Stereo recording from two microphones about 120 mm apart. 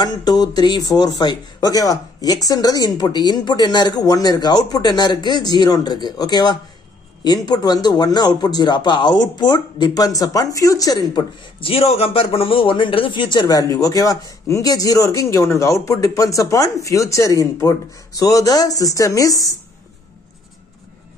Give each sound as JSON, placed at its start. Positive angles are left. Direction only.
{"t": 0.0, "sound": "speech", "side_deg": 35}
{"t": 11.6, "sound": "a man's voice", "side_deg": 55}